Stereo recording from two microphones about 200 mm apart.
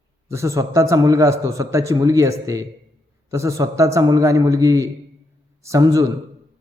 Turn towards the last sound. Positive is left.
turn(degrees=-15)  # may be behind; listen again after turning